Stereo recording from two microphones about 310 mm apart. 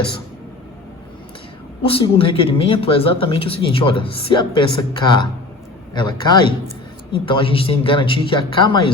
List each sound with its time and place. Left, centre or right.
1.9 s speech: centre